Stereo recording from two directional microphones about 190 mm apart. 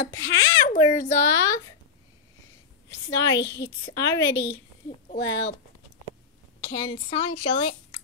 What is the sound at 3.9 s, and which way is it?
Speech, 15° left (ahead or behind).